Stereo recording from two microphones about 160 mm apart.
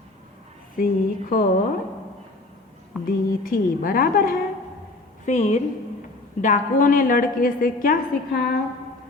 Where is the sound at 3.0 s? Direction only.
Centre (ahead or behind).